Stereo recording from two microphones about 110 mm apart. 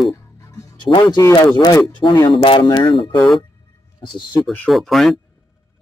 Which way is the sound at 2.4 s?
50° left (ahead or behind).